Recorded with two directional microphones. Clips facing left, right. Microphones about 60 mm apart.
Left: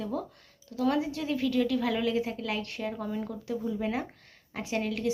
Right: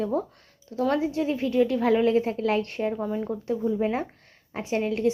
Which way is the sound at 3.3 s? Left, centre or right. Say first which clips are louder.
Right 6 dB; right.